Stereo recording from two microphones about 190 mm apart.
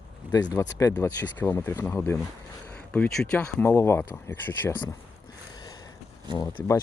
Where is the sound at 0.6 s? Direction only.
15° left (ahead or behind).